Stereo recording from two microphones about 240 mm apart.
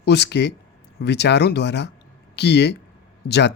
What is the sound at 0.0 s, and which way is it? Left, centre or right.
Speech, left.